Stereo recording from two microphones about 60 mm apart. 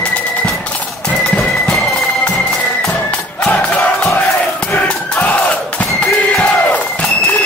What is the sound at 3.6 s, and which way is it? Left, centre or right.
Crowd, left.